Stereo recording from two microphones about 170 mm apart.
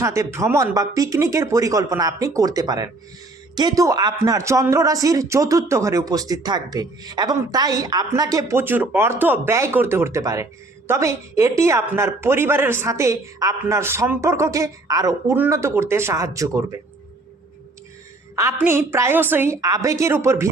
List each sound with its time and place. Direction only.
0.0 s a man's voice: 15° right (ahead or behind)
18.3 s a man's voice: 15° right (ahead or behind)